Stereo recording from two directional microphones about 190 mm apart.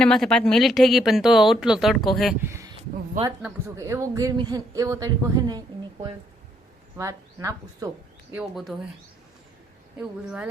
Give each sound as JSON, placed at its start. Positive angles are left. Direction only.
{"t": 0.0, "sound": "speech", "side_deg": 5}
{"t": 2.4, "sound": "a sound", "side_deg": -15}
{"t": 3.4, "sound": "speech", "side_deg": -15}
{"t": 8.3, "sound": "speech", "side_deg": -5}
{"t": 10.0, "sound": "speech", "side_deg": -5}